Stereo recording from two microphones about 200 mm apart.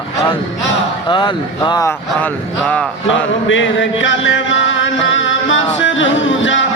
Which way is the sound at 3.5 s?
65° left (ahead or behind).